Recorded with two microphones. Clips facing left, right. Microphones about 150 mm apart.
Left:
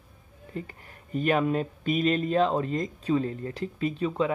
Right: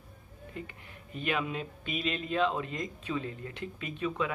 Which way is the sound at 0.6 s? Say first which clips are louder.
Left 6 dB; 40° left (ahead or behind).